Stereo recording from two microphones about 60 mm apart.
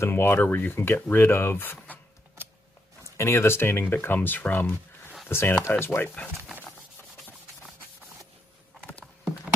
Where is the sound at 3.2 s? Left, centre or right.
Left.